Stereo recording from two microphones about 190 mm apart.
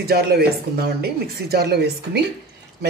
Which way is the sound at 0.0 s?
55° right (ahead or behind).